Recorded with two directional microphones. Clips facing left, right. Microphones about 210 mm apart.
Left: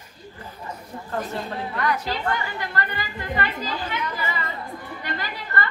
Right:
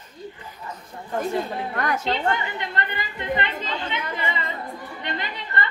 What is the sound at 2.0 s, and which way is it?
A woman's voice, 25° right (ahead or behind).